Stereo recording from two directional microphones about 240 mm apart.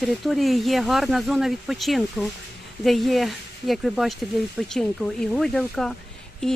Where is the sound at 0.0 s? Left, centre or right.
Centre.